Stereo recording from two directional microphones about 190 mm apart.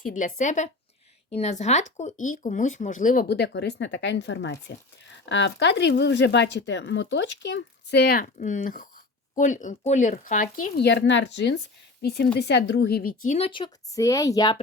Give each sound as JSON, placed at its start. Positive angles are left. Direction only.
{"t": 0.0, "sound": "speech", "side_deg": 45}
{"t": 8.2, "sound": "speech", "side_deg": 40}
{"t": 10.8, "sound": "a woman's voice", "side_deg": 65}
{"t": 13.2, "sound": "speech", "side_deg": 40}
{"t": 13.5, "sound": "speech", "side_deg": 20}